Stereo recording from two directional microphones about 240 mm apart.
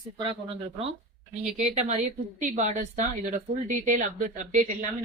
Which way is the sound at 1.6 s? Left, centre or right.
Right.